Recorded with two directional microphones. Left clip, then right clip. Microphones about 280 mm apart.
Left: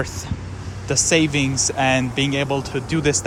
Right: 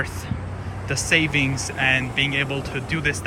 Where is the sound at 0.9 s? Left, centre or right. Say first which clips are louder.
Left 2 dB; centre.